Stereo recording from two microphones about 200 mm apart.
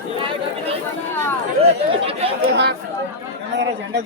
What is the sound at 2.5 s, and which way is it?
Speech, 55° right (ahead or behind).